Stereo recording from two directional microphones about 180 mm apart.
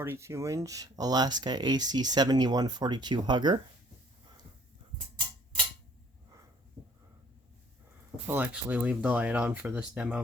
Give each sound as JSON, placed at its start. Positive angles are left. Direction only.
{"t": 0.0, "sound": "speech", "side_deg": -15}
{"t": 8.3, "sound": "speech", "side_deg": -10}